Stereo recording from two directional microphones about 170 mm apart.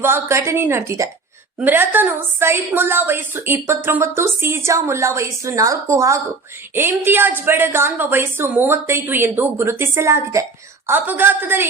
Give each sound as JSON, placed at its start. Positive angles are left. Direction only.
{"t": 0.0, "sound": "a woman's voice", "side_deg": -15}